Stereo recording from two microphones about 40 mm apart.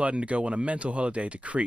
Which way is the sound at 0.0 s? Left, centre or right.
Right.